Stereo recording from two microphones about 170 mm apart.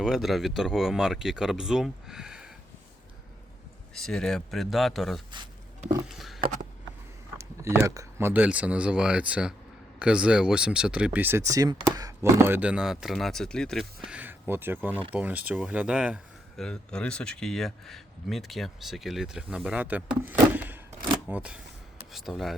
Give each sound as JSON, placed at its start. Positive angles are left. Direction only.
{"t": 0.0, "sound": "speech", "side_deg": 0}
{"t": 3.9, "sound": "speech", "side_deg": 5}
{"t": 6.1, "sound": "a sound", "side_deg": 0}
{"t": 7.3, "sound": "a sound", "side_deg": -15}
{"t": 8.3, "sound": "speech", "side_deg": -10}
{"t": 16.6, "sound": "speech", "side_deg": 5}